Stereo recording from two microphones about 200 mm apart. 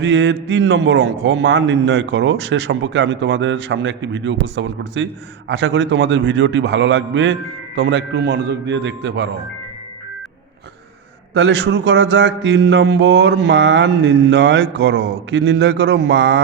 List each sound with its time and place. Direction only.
0.0 s mantra: 60° right (ahead or behind)
11.3 s mantra: 60° right (ahead or behind)